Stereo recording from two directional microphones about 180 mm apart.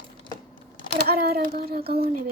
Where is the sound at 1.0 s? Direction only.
60° right (ahead or behind).